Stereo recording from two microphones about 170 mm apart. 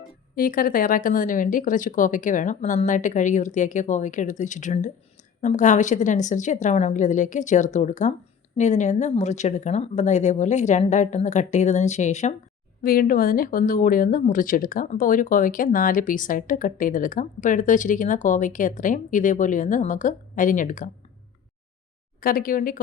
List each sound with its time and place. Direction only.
0.3 s speech: 55° left (ahead or behind)
12.8 s speech: 60° left (ahead or behind)
22.2 s speech: 55° left (ahead or behind)